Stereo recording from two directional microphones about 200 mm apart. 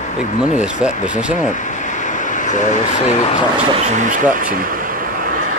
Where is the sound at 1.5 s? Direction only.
40° left (ahead or behind).